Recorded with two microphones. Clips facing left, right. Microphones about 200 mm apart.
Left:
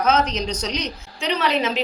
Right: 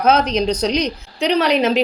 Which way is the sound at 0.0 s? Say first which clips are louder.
Right 5 dB; 60° right (ahead or behind).